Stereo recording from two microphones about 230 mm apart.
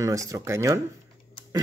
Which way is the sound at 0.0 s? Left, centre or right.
Centre.